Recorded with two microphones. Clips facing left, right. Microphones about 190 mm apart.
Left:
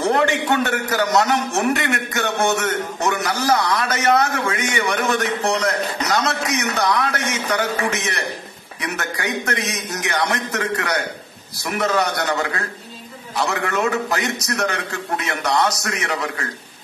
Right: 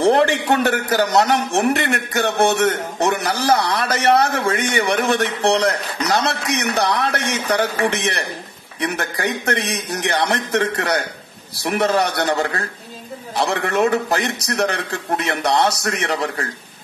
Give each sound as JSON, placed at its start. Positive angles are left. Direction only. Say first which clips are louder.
{"t": 0.0, "sound": "a man's voice", "louder": "right 3 dB", "side_deg": -35}